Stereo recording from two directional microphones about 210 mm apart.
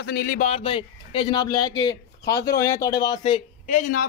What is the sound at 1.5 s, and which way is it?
Speech, 90° left.